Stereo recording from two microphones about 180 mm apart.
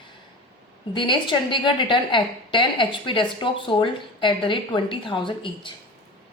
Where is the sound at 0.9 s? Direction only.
25° left (ahead or behind).